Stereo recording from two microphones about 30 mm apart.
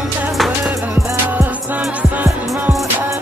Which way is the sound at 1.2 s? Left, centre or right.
Right.